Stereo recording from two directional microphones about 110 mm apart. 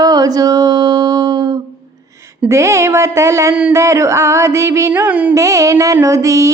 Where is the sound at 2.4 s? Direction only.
25° right (ahead or behind).